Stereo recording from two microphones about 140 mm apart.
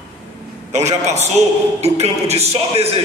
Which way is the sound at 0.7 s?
55° right (ahead or behind).